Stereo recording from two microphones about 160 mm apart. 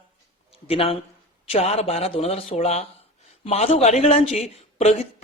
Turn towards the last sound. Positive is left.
turn(degrees=40)  # may be behind; listen again after turning